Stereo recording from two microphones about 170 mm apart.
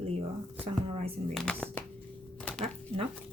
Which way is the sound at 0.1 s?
35° right (ahead or behind).